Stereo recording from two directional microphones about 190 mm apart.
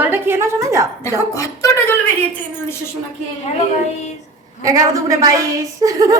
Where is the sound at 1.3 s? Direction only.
15° left (ahead or behind).